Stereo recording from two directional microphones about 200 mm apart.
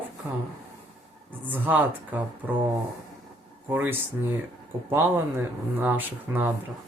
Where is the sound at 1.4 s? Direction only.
10° right (ahead or behind).